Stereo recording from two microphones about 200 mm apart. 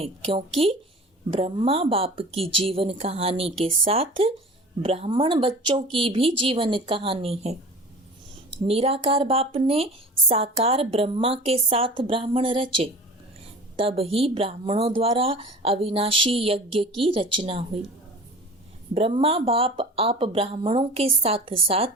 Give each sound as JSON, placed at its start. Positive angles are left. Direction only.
{"t": 0.0, "sound": "a woman's voice", "side_deg": -30}
{"t": 8.6, "sound": "a woman's voice", "side_deg": -30}
{"t": 18.9, "sound": "a woman's voice", "side_deg": -30}